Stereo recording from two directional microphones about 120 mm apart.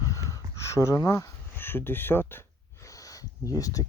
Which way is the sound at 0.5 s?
25° left (ahead or behind).